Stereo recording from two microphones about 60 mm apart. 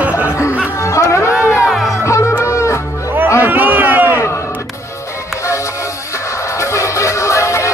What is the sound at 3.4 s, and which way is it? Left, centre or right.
Run, right.